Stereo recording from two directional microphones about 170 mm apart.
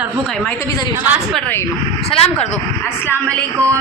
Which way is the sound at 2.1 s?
40° left (ahead or behind).